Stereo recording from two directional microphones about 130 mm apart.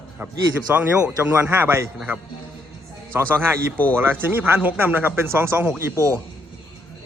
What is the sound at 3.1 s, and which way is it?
A man's voice, 20° right (ahead or behind).